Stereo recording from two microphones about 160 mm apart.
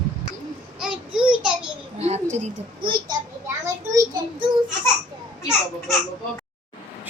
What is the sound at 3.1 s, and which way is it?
A child's voice, 20° right (ahead or behind).